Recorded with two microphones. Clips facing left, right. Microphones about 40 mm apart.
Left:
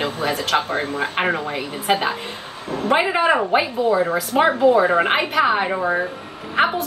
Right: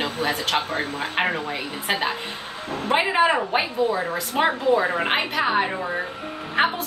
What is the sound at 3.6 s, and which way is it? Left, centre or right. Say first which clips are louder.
Speech: left 4 dB; left.